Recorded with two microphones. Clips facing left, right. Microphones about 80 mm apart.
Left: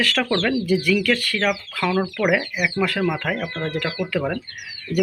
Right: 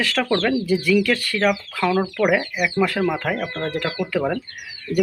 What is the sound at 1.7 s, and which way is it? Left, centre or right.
Speech, centre.